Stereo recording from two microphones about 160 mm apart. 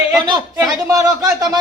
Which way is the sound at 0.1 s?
20° right (ahead or behind).